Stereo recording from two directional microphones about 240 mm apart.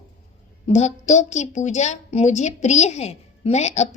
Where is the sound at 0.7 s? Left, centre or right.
Left.